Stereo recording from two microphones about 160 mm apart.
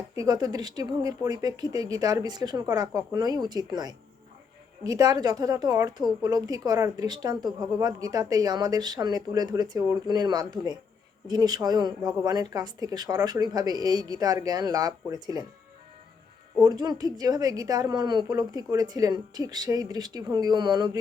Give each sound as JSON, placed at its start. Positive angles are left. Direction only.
{"t": 0.2, "sound": "a woman's voice", "side_deg": -25}
{"t": 16.6, "sound": "a woman's voice", "side_deg": -25}